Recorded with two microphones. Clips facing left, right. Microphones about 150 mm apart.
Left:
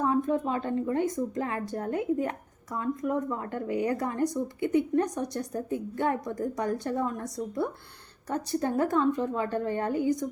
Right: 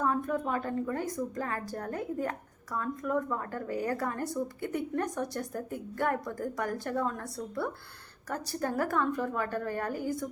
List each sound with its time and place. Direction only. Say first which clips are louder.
0.0 s speech: left 4 dB; 20° left (ahead or behind)